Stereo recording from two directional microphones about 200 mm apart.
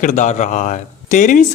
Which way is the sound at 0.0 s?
40° left (ahead or behind).